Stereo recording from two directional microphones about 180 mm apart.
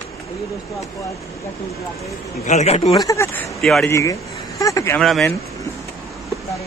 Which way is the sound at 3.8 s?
15° left (ahead or behind).